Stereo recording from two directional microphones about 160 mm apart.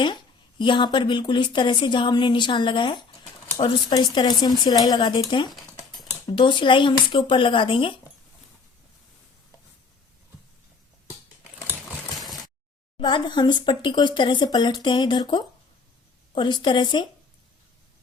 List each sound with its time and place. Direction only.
0.6 s speech: 30° left (ahead or behind)
5.5 s a sound: centre (ahead or behind)
6.2 s speech: 30° left (ahead or behind)
13.0 s speech: 30° left (ahead or behind)